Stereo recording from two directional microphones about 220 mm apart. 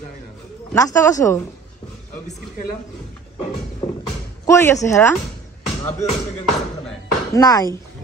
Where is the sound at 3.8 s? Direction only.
25° left (ahead or behind).